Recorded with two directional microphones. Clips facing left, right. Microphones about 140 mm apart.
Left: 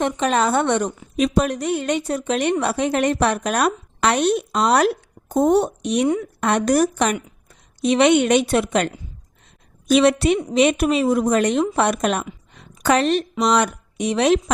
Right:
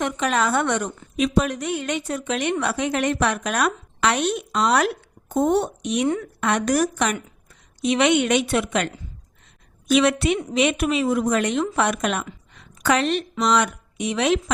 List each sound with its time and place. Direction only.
0.0 s a woman's voice: 30° left (ahead or behind)
12.5 s a sound: 40° left (ahead or behind)
13.4 s a woman's voice: 40° left (ahead or behind)